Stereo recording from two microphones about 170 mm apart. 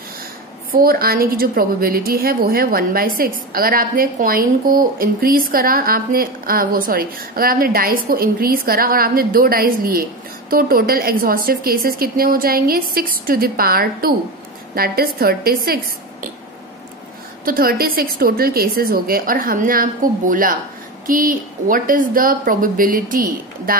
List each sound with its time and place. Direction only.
0.7 s a woman's voice: 60° right (ahead or behind)
17.5 s a woman's voice: 60° right (ahead or behind)